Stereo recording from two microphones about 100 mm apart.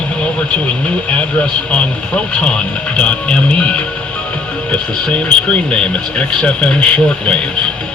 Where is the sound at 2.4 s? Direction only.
10° left (ahead or behind).